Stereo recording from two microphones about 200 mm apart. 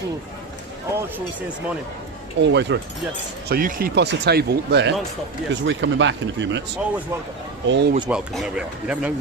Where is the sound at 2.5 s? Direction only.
60° right (ahead or behind).